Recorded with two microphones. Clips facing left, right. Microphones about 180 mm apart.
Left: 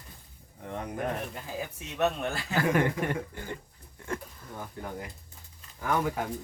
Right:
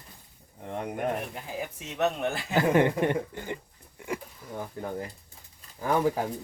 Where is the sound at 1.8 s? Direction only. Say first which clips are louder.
Right 1 dB; 20° right (ahead or behind).